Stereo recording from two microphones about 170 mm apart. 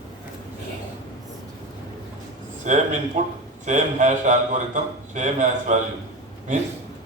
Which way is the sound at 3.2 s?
45° right (ahead or behind).